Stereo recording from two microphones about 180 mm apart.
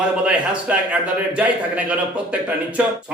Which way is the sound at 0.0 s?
5° right (ahead or behind).